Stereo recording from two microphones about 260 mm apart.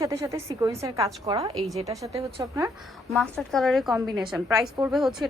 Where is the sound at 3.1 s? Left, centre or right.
Centre.